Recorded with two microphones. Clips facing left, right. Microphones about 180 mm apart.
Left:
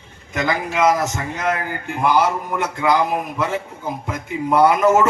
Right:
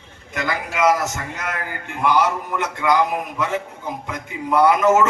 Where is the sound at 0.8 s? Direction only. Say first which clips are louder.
Even; 30° left (ahead or behind).